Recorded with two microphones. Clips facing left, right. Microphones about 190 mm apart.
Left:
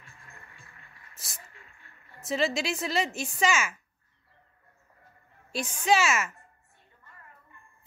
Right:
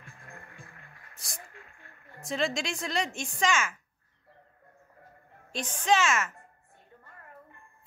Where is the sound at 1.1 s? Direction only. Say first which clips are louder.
Right 3 dB; 5° left (ahead or behind).